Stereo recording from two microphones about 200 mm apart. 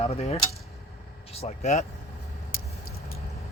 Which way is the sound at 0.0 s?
30° left (ahead or behind).